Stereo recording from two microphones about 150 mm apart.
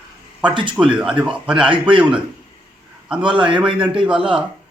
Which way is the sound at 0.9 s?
5° right (ahead or behind).